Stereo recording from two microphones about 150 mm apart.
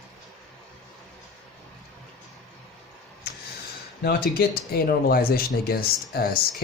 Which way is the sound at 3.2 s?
90° left.